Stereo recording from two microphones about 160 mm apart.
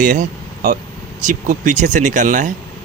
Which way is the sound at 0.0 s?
50° right (ahead or behind).